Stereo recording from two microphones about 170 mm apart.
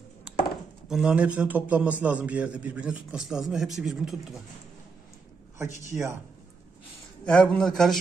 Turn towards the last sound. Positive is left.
turn(degrees=5)  # may be behind; listen again after turning